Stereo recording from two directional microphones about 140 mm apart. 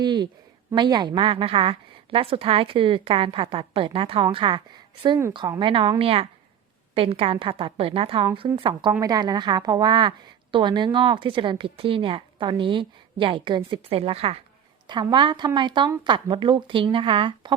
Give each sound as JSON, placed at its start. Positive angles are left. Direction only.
{"t": 0.0, "sound": "a woman's voice", "side_deg": -30}
{"t": 8.9, "sound": "a woman's voice", "side_deg": -25}
{"t": 14.8, "sound": "a woman's voice", "side_deg": -30}